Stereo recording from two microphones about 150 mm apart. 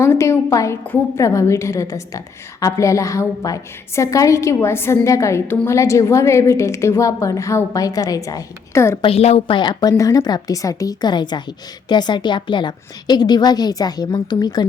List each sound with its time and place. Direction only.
0.0 s a woman's voice: 20° left (ahead or behind)
9.0 s a woman's voice: 40° left (ahead or behind)